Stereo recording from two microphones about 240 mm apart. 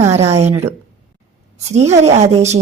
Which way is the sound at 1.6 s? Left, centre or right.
Right.